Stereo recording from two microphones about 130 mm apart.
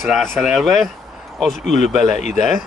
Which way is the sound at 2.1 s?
65° left (ahead or behind).